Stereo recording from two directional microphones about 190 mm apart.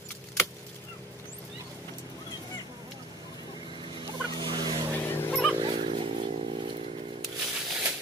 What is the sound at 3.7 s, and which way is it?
Turkey, 25° right (ahead or behind).